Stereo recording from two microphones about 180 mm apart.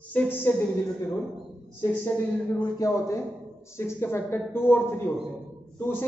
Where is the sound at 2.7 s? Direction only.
15° left (ahead or behind).